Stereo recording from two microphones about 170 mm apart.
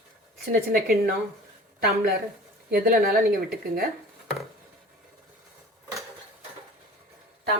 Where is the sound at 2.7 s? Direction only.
60° right (ahead or behind).